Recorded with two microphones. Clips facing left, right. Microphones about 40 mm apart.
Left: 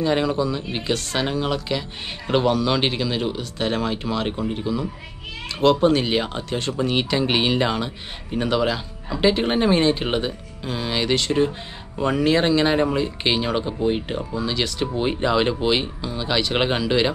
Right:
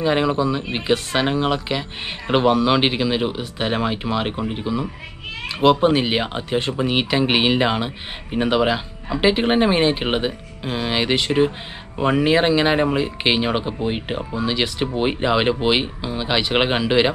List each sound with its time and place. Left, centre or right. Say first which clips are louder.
0.0 s speech: right 2 dB; centre